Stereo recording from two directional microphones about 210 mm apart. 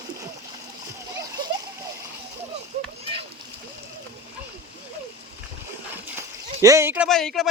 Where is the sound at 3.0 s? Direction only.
25° right (ahead or behind).